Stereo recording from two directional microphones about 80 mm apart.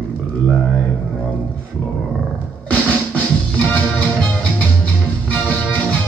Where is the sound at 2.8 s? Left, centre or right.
Centre.